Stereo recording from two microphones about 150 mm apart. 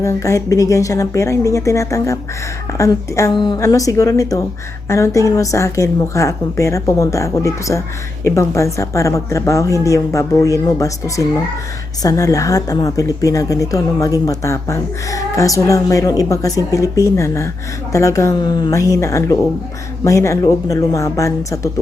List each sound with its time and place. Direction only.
0.0 s speech: 20° left (ahead or behind)